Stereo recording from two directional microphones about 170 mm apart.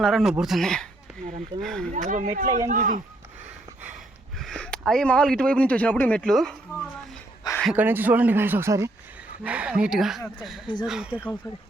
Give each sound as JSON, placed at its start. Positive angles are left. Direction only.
{"t": 0.0, "sound": "speech", "side_deg": 0}
{"t": 1.9, "sound": "speech", "side_deg": -45}
{"t": 4.4, "sound": "speech", "side_deg": 5}
{"t": 7.6, "sound": "speech", "side_deg": -5}